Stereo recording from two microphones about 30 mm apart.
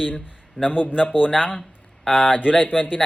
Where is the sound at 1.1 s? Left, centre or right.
Right.